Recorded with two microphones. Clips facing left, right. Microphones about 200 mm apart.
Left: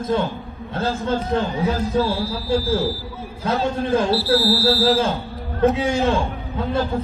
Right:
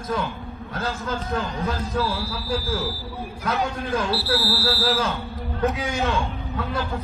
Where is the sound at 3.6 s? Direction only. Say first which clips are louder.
Left 6 dB; 30° left (ahead or behind).